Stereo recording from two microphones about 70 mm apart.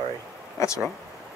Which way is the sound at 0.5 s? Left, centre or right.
Left.